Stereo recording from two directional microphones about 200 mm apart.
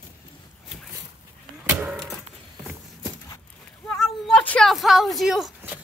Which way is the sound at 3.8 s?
5° left (ahead or behind).